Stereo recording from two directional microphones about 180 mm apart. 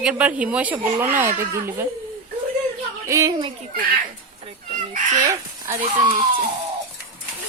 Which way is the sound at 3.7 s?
50° right (ahead or behind).